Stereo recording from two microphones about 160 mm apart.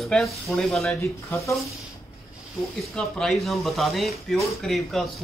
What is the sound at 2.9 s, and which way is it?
Speech, centre (ahead or behind).